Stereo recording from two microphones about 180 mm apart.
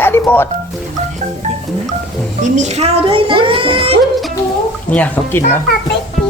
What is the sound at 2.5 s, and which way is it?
A child's voice, 40° right (ahead or behind).